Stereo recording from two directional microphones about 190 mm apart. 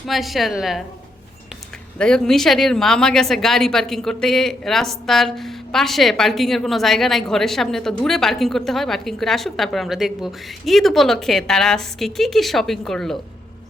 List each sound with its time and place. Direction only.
0.1 s speech: centre (ahead or behind)
2.0 s speech: 5° left (ahead or behind)